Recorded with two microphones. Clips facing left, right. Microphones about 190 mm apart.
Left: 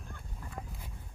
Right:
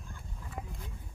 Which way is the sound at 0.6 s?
10° right (ahead or behind).